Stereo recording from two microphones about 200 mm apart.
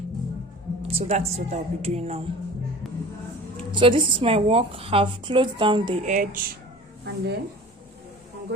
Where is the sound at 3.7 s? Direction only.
25° right (ahead or behind).